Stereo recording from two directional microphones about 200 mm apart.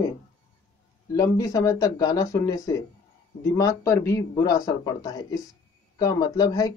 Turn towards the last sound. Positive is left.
turn(degrees=20)  # may be behind; listen again after turning